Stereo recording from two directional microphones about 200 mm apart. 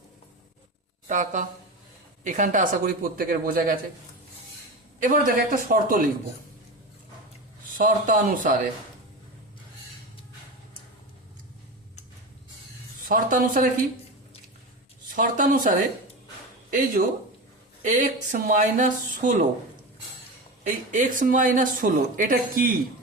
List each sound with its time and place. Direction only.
1.0 s speech: 40° right (ahead or behind)
4.9 s speech: 45° right (ahead or behind)
7.8 s speech: 40° right (ahead or behind)
13.1 s speech: 40° right (ahead or behind)
15.1 s speech: 40° right (ahead or behind)
17.8 s speech: 40° right (ahead or behind)
20.7 s speech: 40° right (ahead or behind)